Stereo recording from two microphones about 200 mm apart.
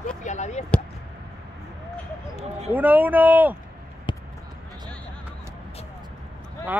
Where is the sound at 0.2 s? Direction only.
35° left (ahead or behind).